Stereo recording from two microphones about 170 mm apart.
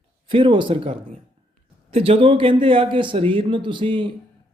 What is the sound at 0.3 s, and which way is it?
A man's voice, 30° right (ahead or behind).